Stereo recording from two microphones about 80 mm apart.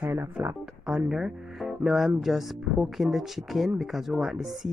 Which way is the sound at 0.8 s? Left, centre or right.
Centre.